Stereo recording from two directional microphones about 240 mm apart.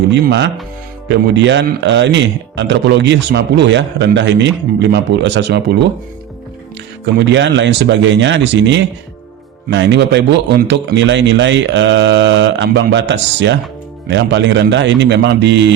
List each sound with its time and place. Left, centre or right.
0.3 s speech: right
7.0 s speech: right